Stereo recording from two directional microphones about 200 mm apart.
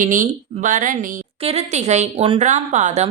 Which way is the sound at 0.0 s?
40° right (ahead or behind).